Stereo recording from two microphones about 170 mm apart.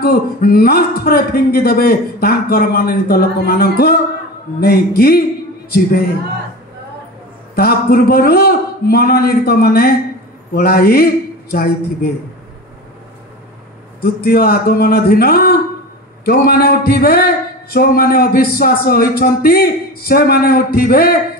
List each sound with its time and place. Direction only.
0.0 s a man's voice: 65° left (ahead or behind)
7.5 s a man's voice: 60° left (ahead or behind)
14.0 s a man's voice: 60° left (ahead or behind)